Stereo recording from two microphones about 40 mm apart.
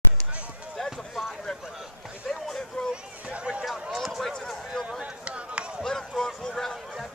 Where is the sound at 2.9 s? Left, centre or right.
Right.